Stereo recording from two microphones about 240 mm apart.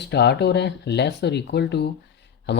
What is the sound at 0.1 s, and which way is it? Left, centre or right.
Speech, left.